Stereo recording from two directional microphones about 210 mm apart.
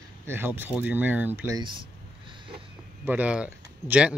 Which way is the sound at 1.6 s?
20° right (ahead or behind).